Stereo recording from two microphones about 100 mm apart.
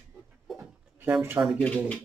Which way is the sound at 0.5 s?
25° right (ahead or behind).